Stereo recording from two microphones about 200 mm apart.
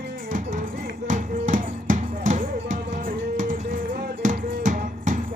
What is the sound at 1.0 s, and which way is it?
Music, 40° right (ahead or behind).